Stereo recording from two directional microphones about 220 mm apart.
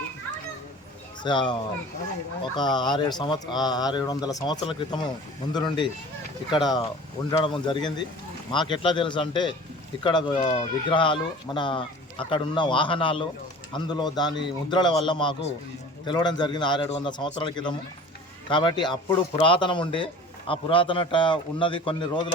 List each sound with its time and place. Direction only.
1.2 s speech: 20° left (ahead or behind)